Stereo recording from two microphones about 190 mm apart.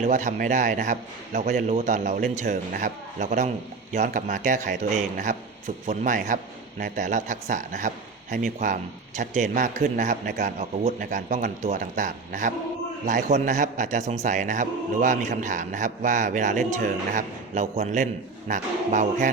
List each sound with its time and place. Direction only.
0.0 s a man's voice: 40° right (ahead or behind)